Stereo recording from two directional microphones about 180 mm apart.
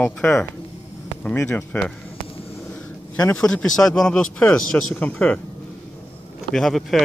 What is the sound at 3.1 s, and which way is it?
Speech, 5° left (ahead or behind).